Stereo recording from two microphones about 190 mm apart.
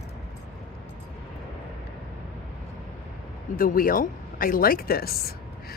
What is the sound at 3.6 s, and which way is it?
A woman's voice, 50° left (ahead or behind).